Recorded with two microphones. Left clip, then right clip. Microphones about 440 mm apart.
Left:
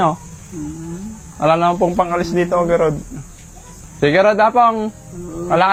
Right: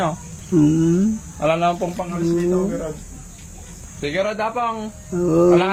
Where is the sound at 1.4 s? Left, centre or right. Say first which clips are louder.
Left 4 dB; left.